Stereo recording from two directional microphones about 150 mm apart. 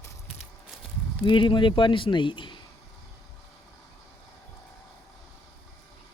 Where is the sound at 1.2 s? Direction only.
35° left (ahead or behind).